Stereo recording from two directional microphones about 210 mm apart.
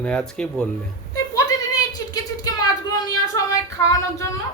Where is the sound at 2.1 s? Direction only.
20° left (ahead or behind).